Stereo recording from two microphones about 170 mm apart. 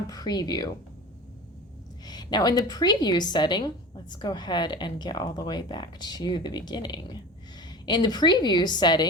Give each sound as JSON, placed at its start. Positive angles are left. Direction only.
{"t": 0.1, "sound": "a woman's voice", "side_deg": 20}
{"t": 2.0, "sound": "a woman's voice", "side_deg": 25}